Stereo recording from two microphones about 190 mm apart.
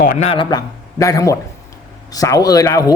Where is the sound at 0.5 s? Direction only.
15° left (ahead or behind).